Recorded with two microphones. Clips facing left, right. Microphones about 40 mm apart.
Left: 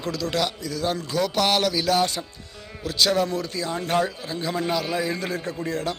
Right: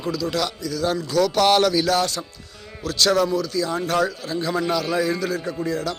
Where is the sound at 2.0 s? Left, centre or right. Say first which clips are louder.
Even; left.